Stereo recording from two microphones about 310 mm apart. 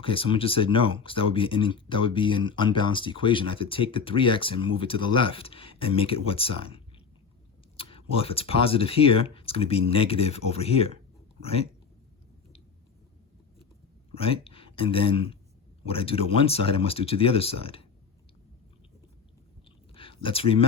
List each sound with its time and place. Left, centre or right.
0.0 s speech: centre
14.1 s speech: centre
19.9 s a sound: centre